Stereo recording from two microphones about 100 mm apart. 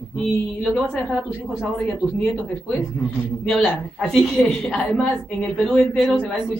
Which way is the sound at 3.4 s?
Centre (ahead or behind).